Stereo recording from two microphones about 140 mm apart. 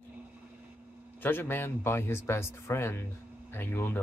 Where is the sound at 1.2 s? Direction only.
15° left (ahead or behind).